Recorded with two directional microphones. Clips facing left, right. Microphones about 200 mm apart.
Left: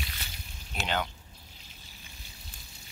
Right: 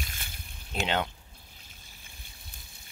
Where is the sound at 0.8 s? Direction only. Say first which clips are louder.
Right 3 dB; 25° right (ahead or behind).